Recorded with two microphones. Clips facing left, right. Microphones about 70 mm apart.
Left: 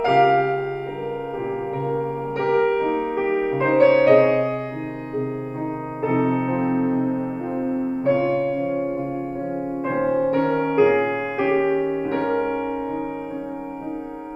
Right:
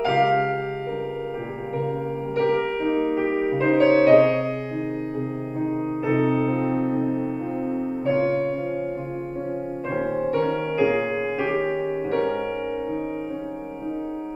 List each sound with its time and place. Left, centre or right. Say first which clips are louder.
0.0 s music: left 4 dB; left
2.4 s music: left 4 dB; left
3.3 s music: left 1 dB; left
6.0 s music: left 2 dB; left
6.4 s electric piano: left 1 dB; left
7.6 s music: left 4 dB; centre
8.0 s music: left 2 dB; left
10.1 s music: left 4 dB; left
10.4 s music: left 5 dB; left